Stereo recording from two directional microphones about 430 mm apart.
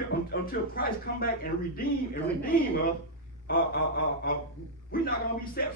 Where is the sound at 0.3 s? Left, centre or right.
Left.